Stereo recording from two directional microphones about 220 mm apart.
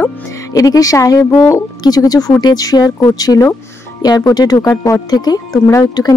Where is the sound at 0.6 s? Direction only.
15° left (ahead or behind).